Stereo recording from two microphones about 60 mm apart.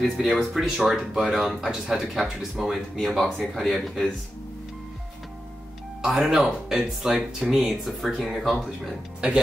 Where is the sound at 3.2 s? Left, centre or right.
Centre.